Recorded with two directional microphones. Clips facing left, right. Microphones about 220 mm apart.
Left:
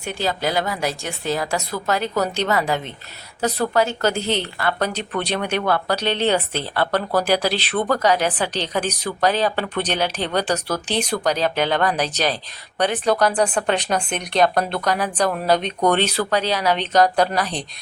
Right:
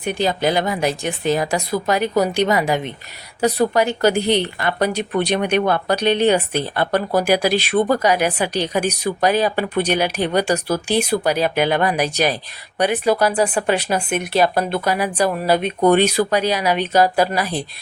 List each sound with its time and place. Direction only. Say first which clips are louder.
0.0 s speech: right 4 dB; 15° right (ahead or behind)